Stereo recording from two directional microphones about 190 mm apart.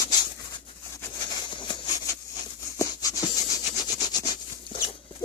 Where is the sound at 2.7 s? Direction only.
20° left (ahead or behind).